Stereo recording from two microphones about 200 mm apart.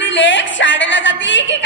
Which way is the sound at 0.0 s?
65° left (ahead or behind).